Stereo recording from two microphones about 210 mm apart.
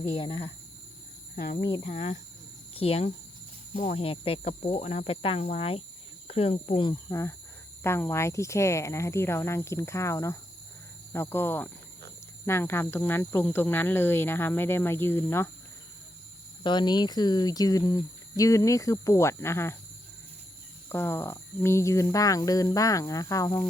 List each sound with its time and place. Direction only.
0.2 s speech: 20° left (ahead or behind)
1.5 s speech: 20° left (ahead or behind)
7.1 s speech: 15° left (ahead or behind)
16.6 s speech: 20° left (ahead or behind)
20.9 s speech: 10° left (ahead or behind)